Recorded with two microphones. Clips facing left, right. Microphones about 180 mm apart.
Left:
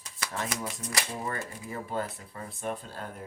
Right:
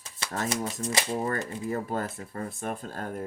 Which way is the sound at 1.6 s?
45° right (ahead or behind).